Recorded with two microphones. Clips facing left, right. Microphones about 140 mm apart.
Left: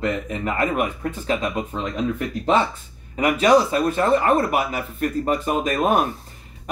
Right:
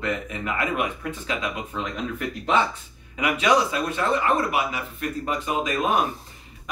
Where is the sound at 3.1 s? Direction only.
40° left (ahead or behind).